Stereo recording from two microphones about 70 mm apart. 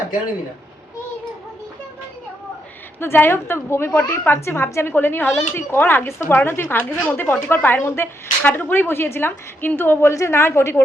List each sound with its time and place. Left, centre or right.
3.0 s speech: left